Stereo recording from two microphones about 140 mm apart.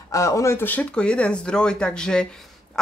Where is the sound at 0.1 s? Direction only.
25° left (ahead or behind).